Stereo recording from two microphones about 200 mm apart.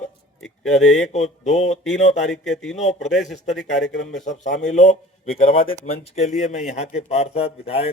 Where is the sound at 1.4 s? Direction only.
35° left (ahead or behind).